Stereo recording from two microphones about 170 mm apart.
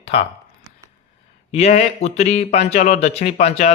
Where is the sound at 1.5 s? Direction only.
40° left (ahead or behind).